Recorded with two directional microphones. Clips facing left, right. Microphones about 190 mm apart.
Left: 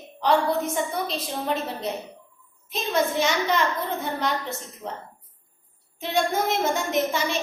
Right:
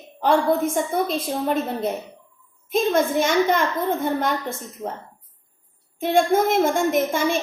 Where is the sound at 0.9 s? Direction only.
50° right (ahead or behind).